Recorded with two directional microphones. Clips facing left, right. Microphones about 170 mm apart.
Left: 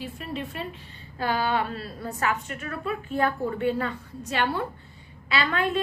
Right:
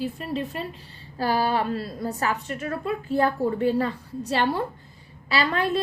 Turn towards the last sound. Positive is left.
turn(degrees=-35)  # may be behind; listen again after turning